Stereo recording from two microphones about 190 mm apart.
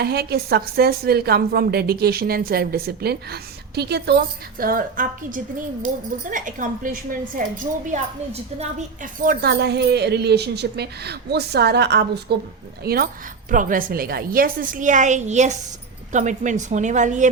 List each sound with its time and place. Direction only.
0.0 s a woman's voice: 55° right (ahead or behind); by 17.3 s 40° right (ahead or behind)